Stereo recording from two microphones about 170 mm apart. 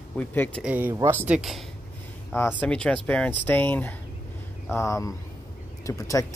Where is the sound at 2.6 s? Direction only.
5° left (ahead or behind).